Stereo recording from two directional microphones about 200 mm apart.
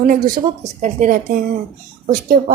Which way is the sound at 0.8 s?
40° right (ahead or behind).